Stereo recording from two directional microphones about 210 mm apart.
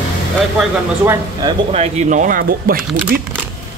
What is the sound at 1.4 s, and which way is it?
Speech, 30° right (ahead or behind).